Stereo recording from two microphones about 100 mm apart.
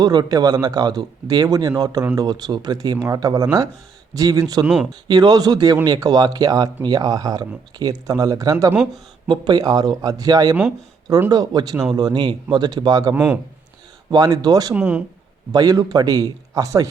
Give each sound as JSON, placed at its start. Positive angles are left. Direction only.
{"t": 0.0, "sound": "speech", "side_deg": -45}
{"t": 4.6, "sound": "speech", "side_deg": -10}
{"t": 5.0, "sound": "speech", "side_deg": -45}
{"t": 8.7, "sound": "speech", "side_deg": -15}
{"t": 9.3, "sound": "speech", "side_deg": -45}
{"t": 13.1, "sound": "speech", "side_deg": -15}
{"t": 14.1, "sound": "speech", "side_deg": -40}
{"t": 14.7, "sound": "speech", "side_deg": -10}
{"t": 15.5, "sound": "speech", "side_deg": -40}